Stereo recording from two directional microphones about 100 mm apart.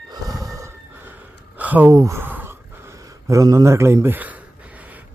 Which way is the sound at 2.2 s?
20° right (ahead or behind).